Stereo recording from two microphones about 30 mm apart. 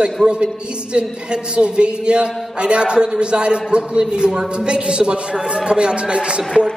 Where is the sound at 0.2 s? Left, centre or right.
Right.